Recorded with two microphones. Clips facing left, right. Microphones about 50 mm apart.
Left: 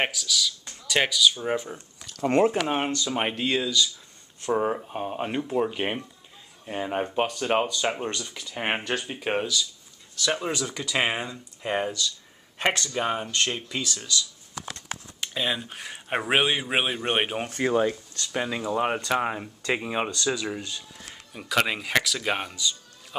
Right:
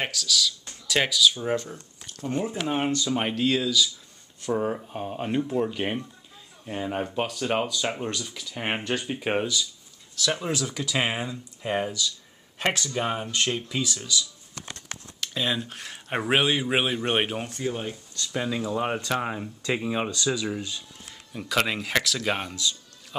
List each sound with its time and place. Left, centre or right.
0.1 s speech: centre
2.2 s speech: left
3.1 s speech: centre
9.0 s speech: centre
15.1 s speech: centre
17.6 s speech: left
18.3 s speech: centre